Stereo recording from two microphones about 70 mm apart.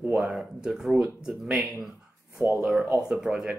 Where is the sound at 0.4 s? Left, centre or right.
Centre.